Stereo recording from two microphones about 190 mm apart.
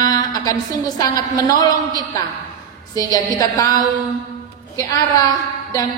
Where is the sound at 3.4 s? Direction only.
20° left (ahead or behind).